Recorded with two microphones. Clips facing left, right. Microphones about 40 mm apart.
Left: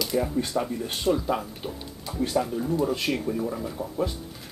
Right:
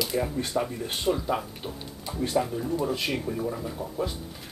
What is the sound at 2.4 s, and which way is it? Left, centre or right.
Speech, centre.